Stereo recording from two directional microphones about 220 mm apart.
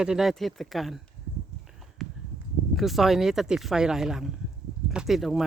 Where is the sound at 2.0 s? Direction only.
Centre (ahead or behind).